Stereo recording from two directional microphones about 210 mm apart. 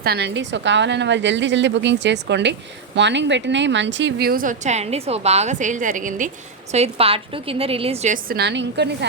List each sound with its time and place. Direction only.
0.0 s a woman's voice: 50° right (ahead or behind)